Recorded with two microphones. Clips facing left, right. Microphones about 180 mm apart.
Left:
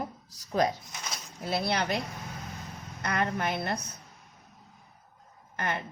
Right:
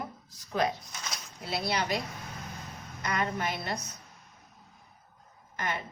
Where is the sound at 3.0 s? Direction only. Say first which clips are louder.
Left 2 dB; 55° left (ahead or behind).